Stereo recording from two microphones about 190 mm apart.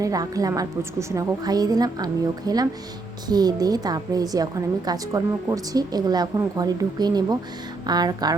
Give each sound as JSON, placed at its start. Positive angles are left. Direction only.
{"t": 0.0, "sound": "a woman's voice", "side_deg": -20}